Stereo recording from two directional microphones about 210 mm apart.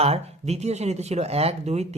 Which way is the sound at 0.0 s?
30° right (ahead or behind).